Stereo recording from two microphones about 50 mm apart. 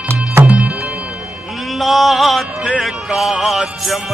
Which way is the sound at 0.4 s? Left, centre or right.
Right.